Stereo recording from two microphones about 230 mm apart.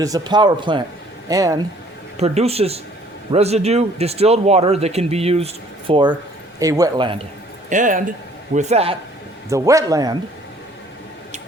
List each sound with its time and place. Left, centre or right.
0.0 s a man's voice: centre
2.1 s a man's voice: right
7.7 s speech: right
9.5 s a man's voice: centre